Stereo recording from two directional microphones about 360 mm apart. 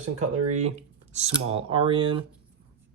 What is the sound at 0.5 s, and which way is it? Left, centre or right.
Speech, centre.